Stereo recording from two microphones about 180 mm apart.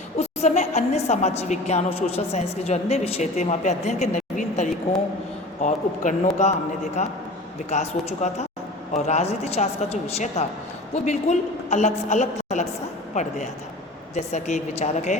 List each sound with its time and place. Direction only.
0.2 s a woman's voice: 40° left (ahead or behind)
14.2 s a woman's voice: 40° left (ahead or behind)